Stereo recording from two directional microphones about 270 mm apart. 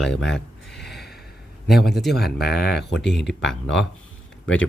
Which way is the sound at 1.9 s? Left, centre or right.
Centre.